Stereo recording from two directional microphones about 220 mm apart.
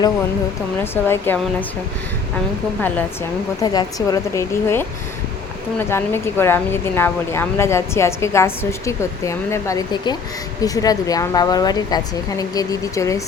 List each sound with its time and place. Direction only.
1.0 s speech: 10° left (ahead or behind)
3.6 s speech: 15° left (ahead or behind)
5.9 s speech: 10° left (ahead or behind)